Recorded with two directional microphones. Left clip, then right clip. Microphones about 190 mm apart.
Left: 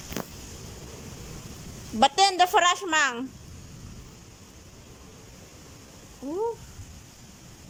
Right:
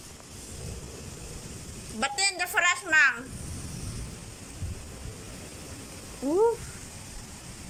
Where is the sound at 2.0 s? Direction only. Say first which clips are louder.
Left 8 dB; 35° left (ahead or behind).